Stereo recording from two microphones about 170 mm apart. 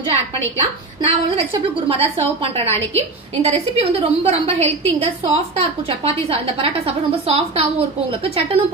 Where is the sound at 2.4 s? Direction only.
35° right (ahead or behind).